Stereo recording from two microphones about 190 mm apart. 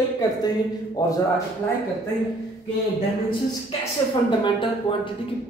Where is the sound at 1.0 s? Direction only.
20° left (ahead or behind).